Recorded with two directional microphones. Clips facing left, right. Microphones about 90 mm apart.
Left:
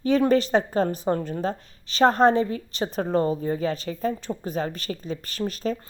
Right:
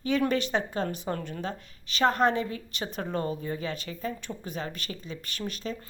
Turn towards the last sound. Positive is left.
turn(degrees=40)  # may be behind; listen again after turning